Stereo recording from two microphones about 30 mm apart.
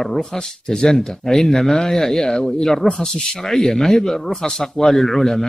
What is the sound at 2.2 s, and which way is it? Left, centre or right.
Speech, centre.